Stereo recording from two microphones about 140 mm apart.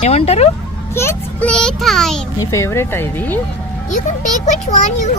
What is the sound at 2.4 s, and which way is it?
Speech, 20° left (ahead or behind).